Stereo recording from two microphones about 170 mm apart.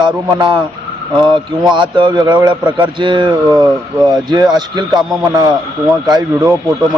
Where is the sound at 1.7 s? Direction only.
30° right (ahead or behind).